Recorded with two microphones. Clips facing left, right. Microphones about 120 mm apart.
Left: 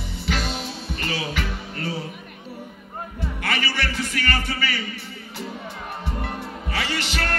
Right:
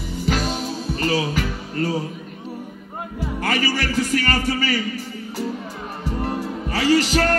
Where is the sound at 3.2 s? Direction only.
40° right (ahead or behind).